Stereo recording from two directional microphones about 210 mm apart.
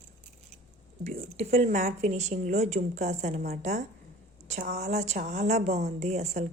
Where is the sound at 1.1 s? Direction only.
30° right (ahead or behind).